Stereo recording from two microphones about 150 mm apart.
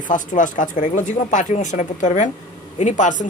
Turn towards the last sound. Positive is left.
turn(degrees=55)  # may be behind; listen again after turning